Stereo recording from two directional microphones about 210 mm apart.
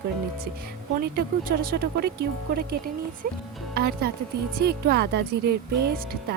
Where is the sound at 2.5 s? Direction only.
45° right (ahead or behind).